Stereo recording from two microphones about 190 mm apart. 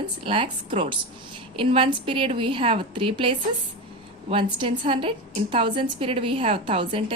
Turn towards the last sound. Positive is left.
turn(degrees=-30)  # may be behind; listen again after turning